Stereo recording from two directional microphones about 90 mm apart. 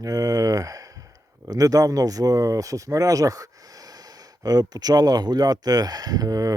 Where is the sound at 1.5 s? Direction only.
40° right (ahead or behind).